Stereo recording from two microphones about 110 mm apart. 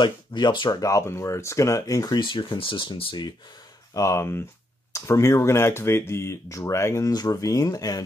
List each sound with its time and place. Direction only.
0.0 s speech: 40° left (ahead or behind)
3.9 s speech: 25° left (ahead or behind)